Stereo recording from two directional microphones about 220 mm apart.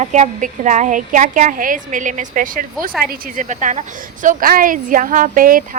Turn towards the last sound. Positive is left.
turn(degrees=-40)  # may be behind; listen again after turning